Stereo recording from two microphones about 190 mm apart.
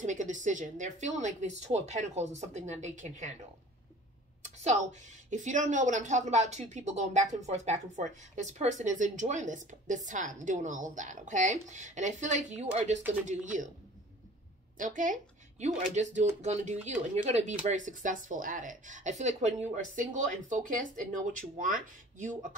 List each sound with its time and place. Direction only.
0.0 s speech: 40° right (ahead or behind)
5.3 s speech: 40° right (ahead or behind)
14.8 s speech: 45° right (ahead or behind)